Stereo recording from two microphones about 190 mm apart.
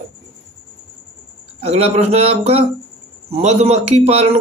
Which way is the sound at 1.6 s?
35° right (ahead or behind).